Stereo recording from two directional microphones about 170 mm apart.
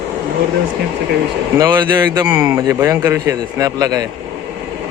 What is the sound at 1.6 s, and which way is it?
Speech, 25° right (ahead or behind).